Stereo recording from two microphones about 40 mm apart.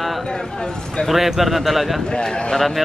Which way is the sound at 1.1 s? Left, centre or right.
Centre.